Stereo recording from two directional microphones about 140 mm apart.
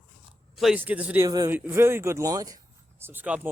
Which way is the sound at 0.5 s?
Centre (ahead or behind).